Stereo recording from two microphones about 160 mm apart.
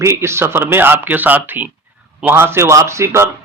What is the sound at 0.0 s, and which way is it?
A man's voice, 15° right (ahead or behind).